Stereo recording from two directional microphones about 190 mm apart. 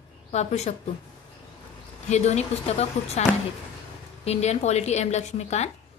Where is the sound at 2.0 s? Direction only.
35° left (ahead or behind).